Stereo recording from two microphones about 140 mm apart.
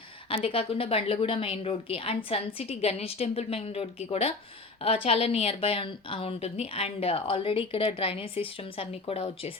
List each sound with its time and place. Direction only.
0.3 s a woman's voice: 40° left (ahead or behind)